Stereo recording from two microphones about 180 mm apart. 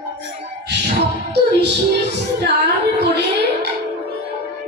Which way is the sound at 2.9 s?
70° right (ahead or behind).